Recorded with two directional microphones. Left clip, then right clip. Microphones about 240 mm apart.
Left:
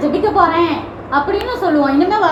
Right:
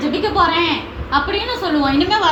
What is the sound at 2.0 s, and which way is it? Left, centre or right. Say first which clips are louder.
Speech: left 2 dB; right.